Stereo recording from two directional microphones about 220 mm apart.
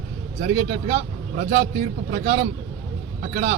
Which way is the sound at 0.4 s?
40° right (ahead or behind).